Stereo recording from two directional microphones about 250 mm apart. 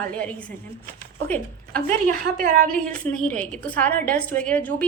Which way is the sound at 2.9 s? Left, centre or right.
Centre.